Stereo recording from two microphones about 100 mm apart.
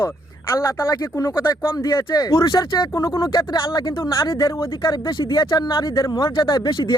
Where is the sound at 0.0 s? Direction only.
25° left (ahead or behind).